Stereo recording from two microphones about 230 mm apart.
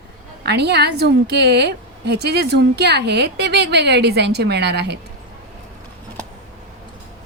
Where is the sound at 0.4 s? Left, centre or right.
Right.